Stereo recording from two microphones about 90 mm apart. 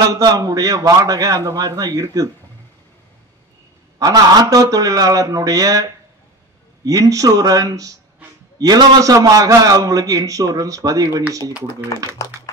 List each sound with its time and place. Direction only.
0.0 s a man's voice: 40° right (ahead or behind)
4.0 s a man's voice: 45° right (ahead or behind)
12.2 s speech: 35° left (ahead or behind)